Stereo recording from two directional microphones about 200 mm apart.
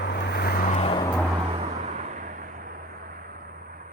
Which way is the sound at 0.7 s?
30° left (ahead or behind).